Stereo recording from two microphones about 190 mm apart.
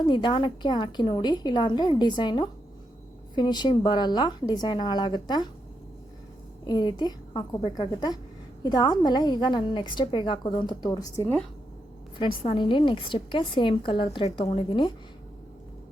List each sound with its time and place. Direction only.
0.0 s a woman's voice: 25° left (ahead or behind)
6.7 s a woman's voice: 25° left (ahead or behind)
12.4 s a woman's voice: 30° left (ahead or behind)